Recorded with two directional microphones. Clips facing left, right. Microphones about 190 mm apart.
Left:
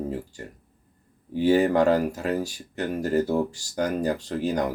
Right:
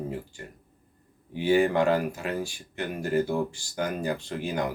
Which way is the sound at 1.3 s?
40° left (ahead or behind).